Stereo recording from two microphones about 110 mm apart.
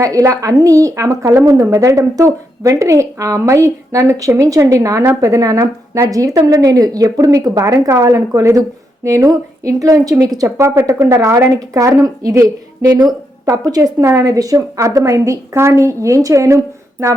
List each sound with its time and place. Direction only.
0.0 s a woman's voice: 30° right (ahead or behind)